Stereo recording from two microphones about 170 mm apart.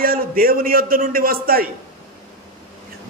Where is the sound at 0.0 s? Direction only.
60° right (ahead or behind).